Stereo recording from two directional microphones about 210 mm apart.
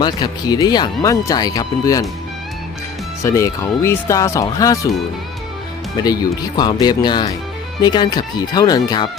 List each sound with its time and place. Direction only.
0.0 s speech: 20° left (ahead or behind)
3.2 s speech: 15° left (ahead or behind)
6.6 s speech: 20° left (ahead or behind)